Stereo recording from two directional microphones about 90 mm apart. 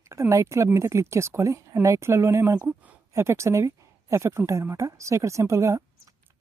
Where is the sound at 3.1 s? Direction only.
30° right (ahead or behind).